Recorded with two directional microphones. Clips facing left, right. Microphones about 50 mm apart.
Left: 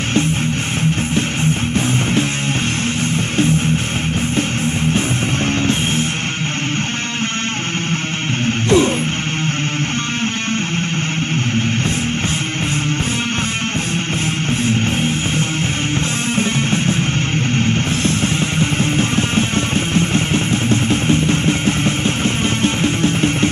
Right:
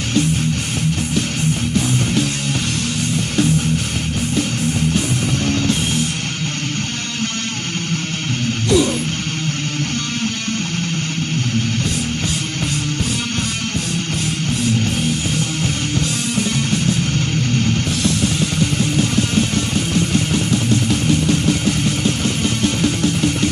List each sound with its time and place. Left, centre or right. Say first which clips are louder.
5.5 s music: left 1 dB; left
8.6 s music: left 2 dB; left
14.7 s music: even; left
18.0 s music: left 1 dB; left